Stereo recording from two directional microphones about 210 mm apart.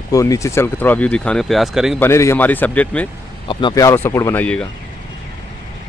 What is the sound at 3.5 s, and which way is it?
Speech, 20° left (ahead or behind).